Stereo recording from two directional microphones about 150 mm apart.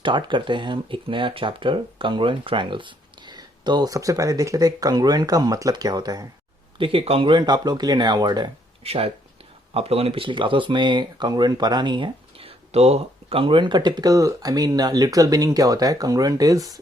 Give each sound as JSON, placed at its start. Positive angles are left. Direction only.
{"t": 0.0, "sound": "speech", "side_deg": -30}
{"t": 6.7, "sound": "speech", "side_deg": -35}
{"t": 8.8, "sound": "speech", "side_deg": -40}